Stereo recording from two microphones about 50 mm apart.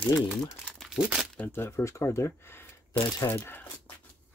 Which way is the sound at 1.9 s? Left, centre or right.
Left.